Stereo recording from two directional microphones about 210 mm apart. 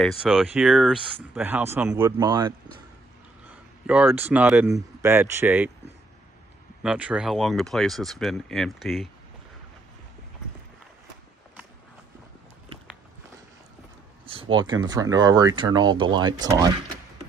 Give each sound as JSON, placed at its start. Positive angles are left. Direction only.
{"t": 0.0, "sound": "speech", "side_deg": 0}
{"t": 6.8, "sound": "speech", "side_deg": -5}
{"t": 14.2, "sound": "speech", "side_deg": -25}